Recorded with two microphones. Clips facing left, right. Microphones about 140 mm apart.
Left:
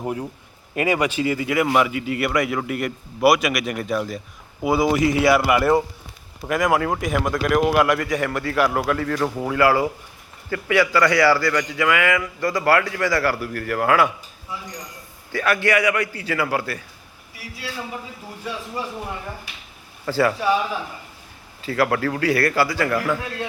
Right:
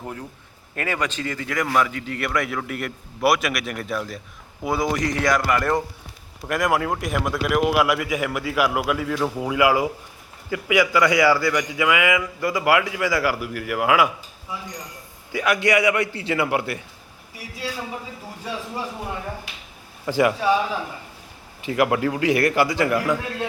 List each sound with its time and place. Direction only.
0.0 s a man's voice: 15° left (ahead or behind); by 14.1 s 10° right (ahead or behind)
15.3 s a man's voice: 15° right (ahead or behind)
20.1 s a man's voice: 15° right (ahead or behind)
21.6 s a man's voice: 20° right (ahead or behind)